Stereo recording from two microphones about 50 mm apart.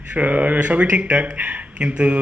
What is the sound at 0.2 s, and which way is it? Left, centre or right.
Speech, right.